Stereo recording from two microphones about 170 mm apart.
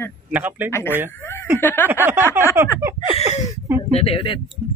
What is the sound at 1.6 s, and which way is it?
Speech, 10° left (ahead or behind).